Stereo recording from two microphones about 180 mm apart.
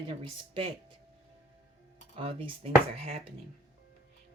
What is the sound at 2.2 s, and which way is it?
Speech, 30° right (ahead or behind).